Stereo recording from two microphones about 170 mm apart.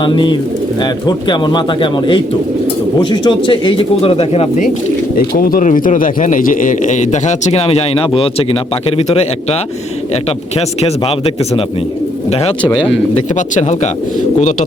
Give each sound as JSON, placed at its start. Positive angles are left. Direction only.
{"t": 0.0, "sound": "speech", "side_deg": 30}
{"t": 5.1, "sound": "a man's voice", "side_deg": 60}
{"t": 10.8, "sound": "speech", "side_deg": 35}
{"t": 12.3, "sound": "speech", "side_deg": 35}
{"t": 13.6, "sound": "a man's voice", "side_deg": 40}